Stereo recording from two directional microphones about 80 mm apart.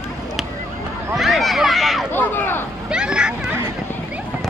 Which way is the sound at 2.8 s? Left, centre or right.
Centre.